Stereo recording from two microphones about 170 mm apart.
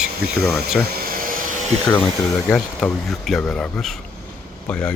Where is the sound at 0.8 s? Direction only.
60° right (ahead or behind).